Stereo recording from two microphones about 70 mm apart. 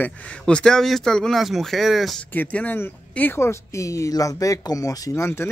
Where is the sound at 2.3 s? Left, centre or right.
Left.